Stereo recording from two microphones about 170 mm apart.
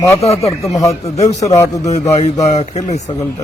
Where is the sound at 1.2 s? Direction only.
40° left (ahead or behind).